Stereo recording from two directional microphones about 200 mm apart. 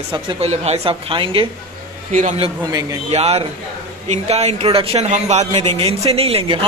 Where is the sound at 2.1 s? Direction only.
40° right (ahead or behind).